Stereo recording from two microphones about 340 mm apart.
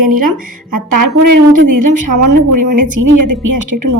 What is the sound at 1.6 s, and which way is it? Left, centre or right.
A woman's voice, right.